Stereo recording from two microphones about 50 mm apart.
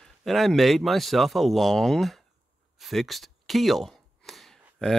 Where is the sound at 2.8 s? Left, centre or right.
Centre.